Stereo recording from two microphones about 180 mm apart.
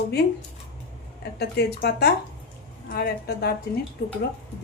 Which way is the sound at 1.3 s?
65° left (ahead or behind).